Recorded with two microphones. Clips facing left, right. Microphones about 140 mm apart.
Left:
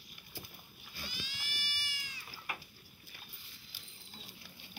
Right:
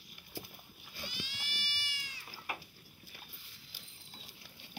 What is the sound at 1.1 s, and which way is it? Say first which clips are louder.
Cat: right 1 dB; 65° right (ahead or behind).